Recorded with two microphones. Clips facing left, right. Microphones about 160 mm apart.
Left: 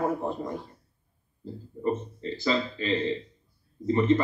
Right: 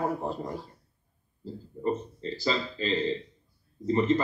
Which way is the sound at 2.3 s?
40° right (ahead or behind).